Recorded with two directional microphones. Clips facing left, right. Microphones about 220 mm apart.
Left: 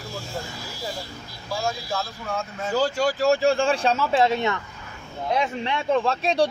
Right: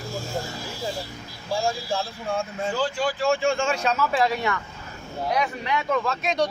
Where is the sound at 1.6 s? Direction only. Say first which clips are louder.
Right 1 dB; 30° right (ahead or behind).